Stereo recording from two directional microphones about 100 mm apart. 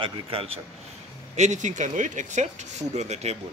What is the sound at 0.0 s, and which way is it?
Speech, 70° right (ahead or behind).